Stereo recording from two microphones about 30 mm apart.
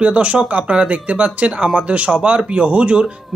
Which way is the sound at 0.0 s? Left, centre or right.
Right.